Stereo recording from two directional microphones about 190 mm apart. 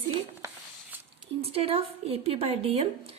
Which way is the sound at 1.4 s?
30° right (ahead or behind).